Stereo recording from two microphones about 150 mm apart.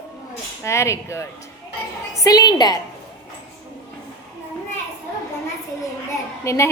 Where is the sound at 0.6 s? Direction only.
20° left (ahead or behind).